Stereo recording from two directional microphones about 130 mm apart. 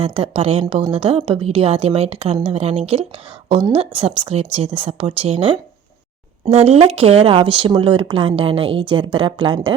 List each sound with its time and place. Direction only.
0.0 s speech: 50° right (ahead or behind)